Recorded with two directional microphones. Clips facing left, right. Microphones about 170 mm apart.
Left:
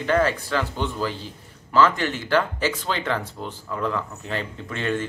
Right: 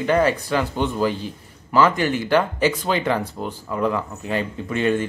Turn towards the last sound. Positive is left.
turn(degrees=-15)  # may be behind; listen again after turning